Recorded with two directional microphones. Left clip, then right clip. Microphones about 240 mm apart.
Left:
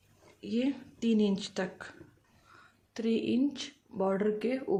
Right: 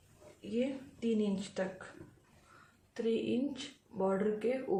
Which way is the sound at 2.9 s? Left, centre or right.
Left.